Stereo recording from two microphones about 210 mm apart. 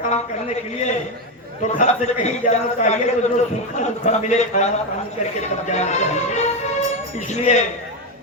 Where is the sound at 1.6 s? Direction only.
35° left (ahead or behind).